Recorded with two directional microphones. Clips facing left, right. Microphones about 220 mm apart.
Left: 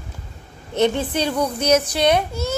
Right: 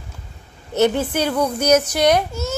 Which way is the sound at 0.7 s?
5° right (ahead or behind).